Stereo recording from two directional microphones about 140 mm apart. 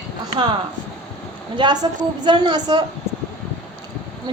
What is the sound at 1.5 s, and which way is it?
A woman's voice, 30° right (ahead or behind).